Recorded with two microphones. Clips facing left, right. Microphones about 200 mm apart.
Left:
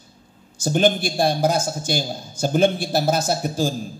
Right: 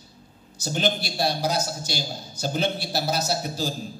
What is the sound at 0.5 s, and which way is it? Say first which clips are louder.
A man's voice: left 7 dB; 50° left (ahead or behind).